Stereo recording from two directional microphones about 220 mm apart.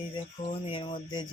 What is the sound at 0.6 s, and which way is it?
Speech, 25° left (ahead or behind).